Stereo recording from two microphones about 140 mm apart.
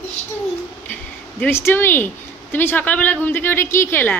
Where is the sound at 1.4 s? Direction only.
15° left (ahead or behind).